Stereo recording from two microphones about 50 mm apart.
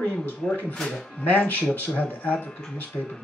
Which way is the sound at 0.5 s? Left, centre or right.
Left.